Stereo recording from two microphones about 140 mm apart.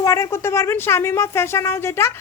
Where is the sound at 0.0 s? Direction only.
20° left (ahead or behind).